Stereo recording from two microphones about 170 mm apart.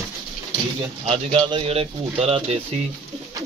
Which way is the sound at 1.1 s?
30° right (ahead or behind).